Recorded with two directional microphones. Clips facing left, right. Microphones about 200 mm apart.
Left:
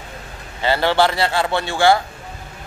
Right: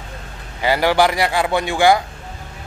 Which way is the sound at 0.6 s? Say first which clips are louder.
Right 1 dB; 15° right (ahead or behind).